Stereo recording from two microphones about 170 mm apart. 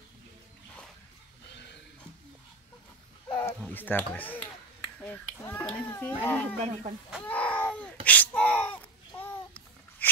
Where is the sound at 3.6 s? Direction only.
10° left (ahead or behind).